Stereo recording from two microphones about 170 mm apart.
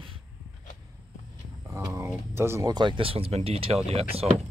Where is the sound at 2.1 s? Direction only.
15° right (ahead or behind); by 4.3 s 35° right (ahead or behind).